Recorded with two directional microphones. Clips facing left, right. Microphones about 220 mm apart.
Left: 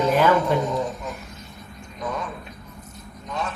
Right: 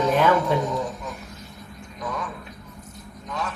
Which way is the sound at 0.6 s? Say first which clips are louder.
Left 2 dB; 20° left (ahead or behind).